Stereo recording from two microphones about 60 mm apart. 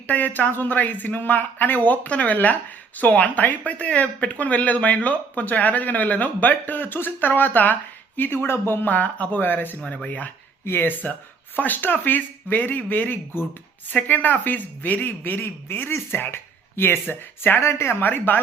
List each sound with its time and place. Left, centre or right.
0.1 s speech: left
8.9 s speech: left
9.8 s speech: left
10.7 s speech: left
17.7 s speech: left
18.0 s speech: left